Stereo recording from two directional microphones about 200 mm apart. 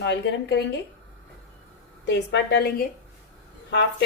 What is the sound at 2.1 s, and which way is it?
Speech, 60° left (ahead or behind).